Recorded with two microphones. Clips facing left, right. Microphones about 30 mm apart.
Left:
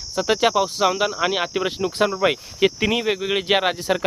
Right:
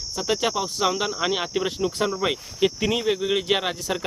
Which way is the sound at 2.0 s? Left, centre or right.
Left.